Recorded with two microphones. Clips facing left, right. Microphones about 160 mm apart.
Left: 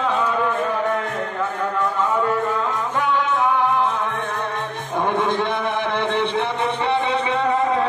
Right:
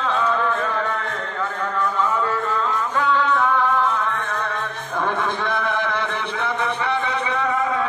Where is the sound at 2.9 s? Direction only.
15° left (ahead or behind).